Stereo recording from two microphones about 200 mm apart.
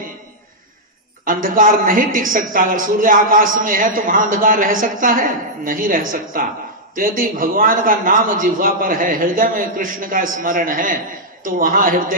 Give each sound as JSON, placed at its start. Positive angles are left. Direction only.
{"t": 1.2, "sound": "a woman's voice", "side_deg": -45}